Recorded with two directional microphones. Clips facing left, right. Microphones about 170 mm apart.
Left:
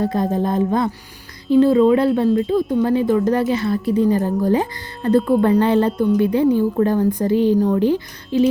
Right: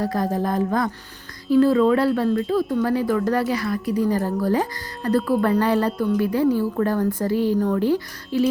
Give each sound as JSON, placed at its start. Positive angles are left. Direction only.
{"t": 0.0, "sound": "speech", "side_deg": 20}